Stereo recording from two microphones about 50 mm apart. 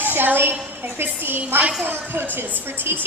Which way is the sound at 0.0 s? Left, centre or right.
Right.